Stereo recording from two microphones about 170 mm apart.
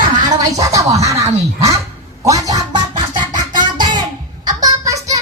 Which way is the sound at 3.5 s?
25° right (ahead or behind).